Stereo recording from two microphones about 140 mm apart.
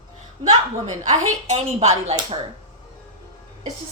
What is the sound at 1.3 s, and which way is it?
Speech, 55° right (ahead or behind).